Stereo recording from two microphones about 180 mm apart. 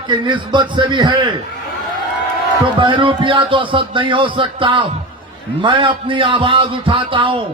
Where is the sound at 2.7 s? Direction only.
25° right (ahead or behind).